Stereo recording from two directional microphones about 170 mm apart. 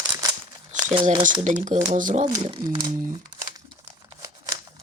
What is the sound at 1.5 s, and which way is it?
Speech, 45° right (ahead or behind).